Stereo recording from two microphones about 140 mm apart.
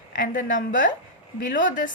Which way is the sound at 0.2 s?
70° left (ahead or behind).